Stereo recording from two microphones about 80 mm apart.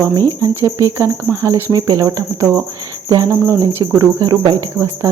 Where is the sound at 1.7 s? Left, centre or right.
Right.